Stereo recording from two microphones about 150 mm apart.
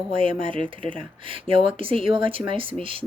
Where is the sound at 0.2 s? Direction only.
35° right (ahead or behind).